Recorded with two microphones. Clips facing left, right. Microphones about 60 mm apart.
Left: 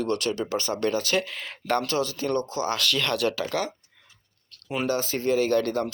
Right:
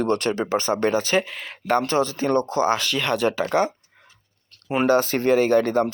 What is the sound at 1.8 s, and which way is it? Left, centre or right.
Speech, right.